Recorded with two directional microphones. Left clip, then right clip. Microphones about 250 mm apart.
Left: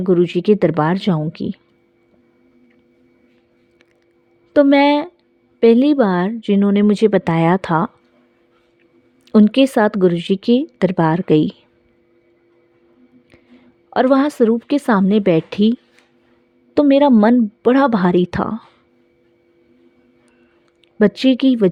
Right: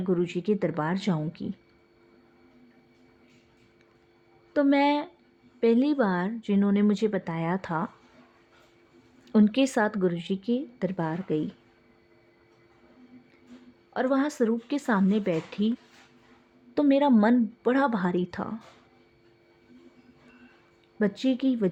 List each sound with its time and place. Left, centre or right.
0.0 s speech: left
4.5 s speech: left
9.2 s speech: left
13.9 s speech: left
16.7 s speech: left
21.0 s speech: left